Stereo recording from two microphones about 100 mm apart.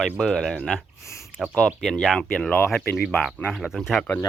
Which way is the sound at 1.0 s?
30° left (ahead or behind).